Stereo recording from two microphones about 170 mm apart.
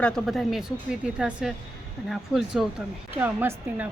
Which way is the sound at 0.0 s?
Centre (ahead or behind).